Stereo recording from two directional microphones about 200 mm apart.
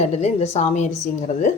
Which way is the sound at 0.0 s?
35° left (ahead or behind).